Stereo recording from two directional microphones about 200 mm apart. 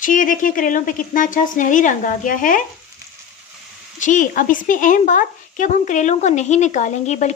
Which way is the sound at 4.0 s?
40° left (ahead or behind).